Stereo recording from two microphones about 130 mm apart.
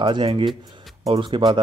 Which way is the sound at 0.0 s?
35° right (ahead or behind).